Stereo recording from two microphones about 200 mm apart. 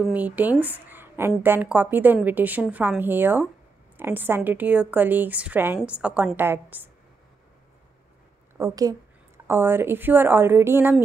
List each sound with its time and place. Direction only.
0.0 s a woman's voice: 10° right (ahead or behind)
8.5 s a woman's voice: 15° right (ahead or behind)